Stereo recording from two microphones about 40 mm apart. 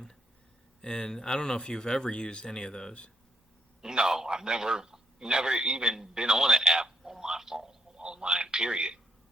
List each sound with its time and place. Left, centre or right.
0.8 s speech: centre
3.8 s a man's voice: centre